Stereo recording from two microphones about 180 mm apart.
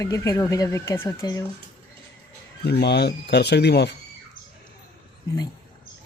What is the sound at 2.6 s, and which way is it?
A man's voice, 65° left (ahead or behind).